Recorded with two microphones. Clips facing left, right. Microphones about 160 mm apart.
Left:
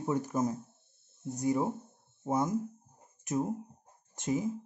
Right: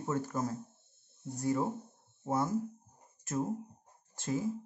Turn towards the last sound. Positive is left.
turn(degrees=20)  # may be behind; listen again after turning